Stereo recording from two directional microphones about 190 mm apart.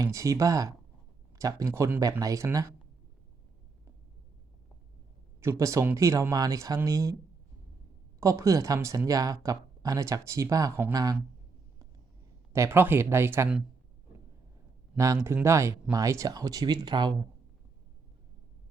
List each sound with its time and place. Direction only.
0.0 s speech: 15° right (ahead or behind)
5.4 s speech: 15° right (ahead or behind)
8.2 s speech: 15° right (ahead or behind)
12.5 s speech: 15° right (ahead or behind)
14.9 s speech: 15° right (ahead or behind)